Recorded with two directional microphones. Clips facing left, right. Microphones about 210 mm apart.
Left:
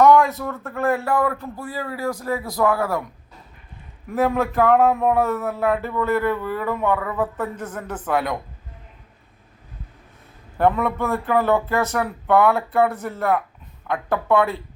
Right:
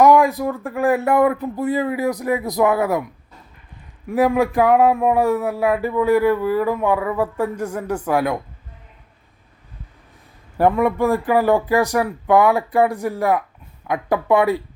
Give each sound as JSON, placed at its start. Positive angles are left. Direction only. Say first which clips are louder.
{"t": 0.0, "sound": "speech", "louder": "right 2 dB", "side_deg": -15}
{"t": 4.1, "sound": "speech", "louder": "right 4 dB", "side_deg": -15}
{"t": 10.6, "sound": "speech", "louder": "right 3 dB", "side_deg": -10}